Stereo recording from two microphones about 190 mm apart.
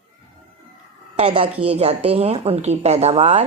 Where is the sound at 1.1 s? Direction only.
35° right (ahead or behind).